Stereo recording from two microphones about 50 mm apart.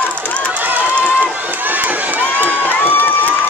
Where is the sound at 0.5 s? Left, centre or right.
Right.